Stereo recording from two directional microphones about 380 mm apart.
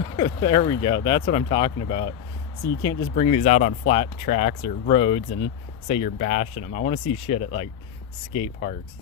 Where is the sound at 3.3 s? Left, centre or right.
Centre.